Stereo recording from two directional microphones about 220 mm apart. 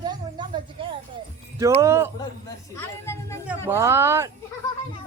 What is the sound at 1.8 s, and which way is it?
Speech, 10° right (ahead or behind).